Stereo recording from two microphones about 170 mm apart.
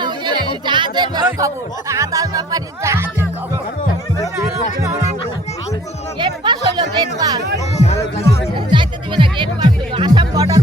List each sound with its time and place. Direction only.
0.0 s music: 25° right (ahead or behind)
4.4 s music: 15° right (ahead or behind)
6.1 s music: 25° right (ahead or behind)
7.9 s music: 15° left (ahead or behind)
8.7 s music: 30° right (ahead or behind)